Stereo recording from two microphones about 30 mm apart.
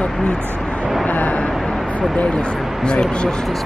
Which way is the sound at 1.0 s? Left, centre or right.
Left.